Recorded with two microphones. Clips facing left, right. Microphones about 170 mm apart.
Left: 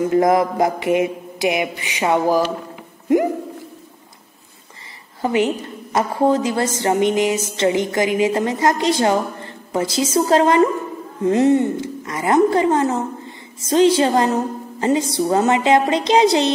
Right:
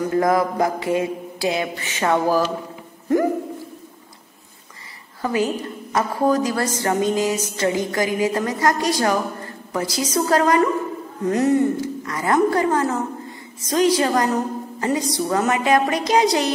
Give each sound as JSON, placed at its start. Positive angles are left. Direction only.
{"t": 0.0, "sound": "music", "side_deg": 20}
{"t": 5.2, "sound": "music", "side_deg": 20}